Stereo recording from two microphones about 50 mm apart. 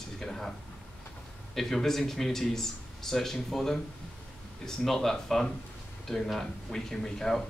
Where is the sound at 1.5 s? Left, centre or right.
Centre.